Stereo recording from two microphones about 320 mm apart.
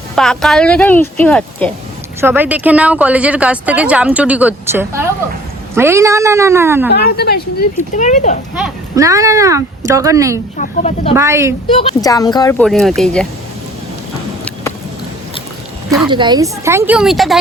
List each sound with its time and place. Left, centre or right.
0.2 s speech: centre
2.2 s speech: centre
6.9 s speech: left
8.5 s speech: centre
10.6 s speech: left
11.1 s speech: centre
11.8 s speech: centre
16.0 s speech: centre